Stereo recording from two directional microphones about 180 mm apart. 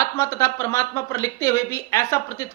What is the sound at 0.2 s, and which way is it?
A woman's voice, 15° left (ahead or behind).